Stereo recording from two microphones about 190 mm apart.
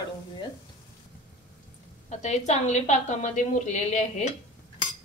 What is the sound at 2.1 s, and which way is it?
A woman's voice, 40° left (ahead or behind).